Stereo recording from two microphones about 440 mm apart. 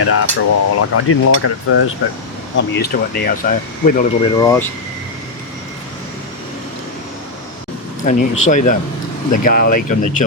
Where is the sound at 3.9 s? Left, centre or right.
Centre.